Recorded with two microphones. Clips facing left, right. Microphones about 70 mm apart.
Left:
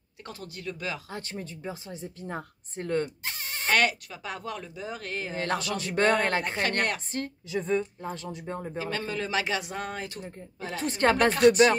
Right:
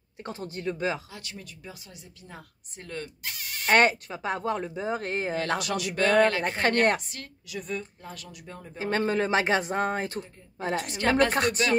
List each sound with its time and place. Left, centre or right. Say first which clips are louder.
0.2 s speech: right 5 dB; right
1.1 s speech: left 6 dB; left
3.6 s speech: right 4 dB; right
5.8 s speech: right 3 dB; left
6.4 s speech: right 3 dB; right
7.1 s a woman's voice: left 9 dB; left
8.7 s speech: right 8 dB; right
10.8 s speech: left 1 dB; left
11.2 s speech: left 6 dB; right